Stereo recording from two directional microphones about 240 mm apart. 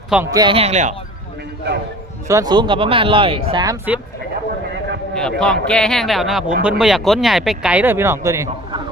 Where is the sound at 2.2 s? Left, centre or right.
Centre.